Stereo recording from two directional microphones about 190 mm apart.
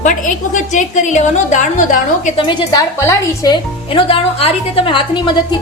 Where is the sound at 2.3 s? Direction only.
20° left (ahead or behind).